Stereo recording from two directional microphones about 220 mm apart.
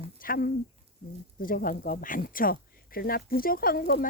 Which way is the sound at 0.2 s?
40° left (ahead or behind).